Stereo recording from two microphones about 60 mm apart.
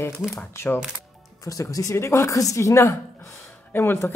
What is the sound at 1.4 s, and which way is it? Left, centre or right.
Speech, left.